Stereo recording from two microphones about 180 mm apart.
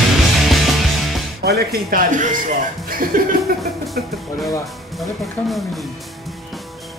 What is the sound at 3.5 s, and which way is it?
Music, 55° right (ahead or behind).